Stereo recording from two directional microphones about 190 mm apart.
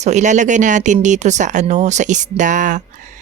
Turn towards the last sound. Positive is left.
turn(degrees=-40)  # may be behind; listen again after turning